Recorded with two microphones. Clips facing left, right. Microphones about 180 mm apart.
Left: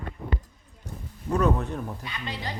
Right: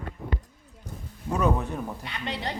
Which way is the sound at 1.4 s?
5° right (ahead or behind).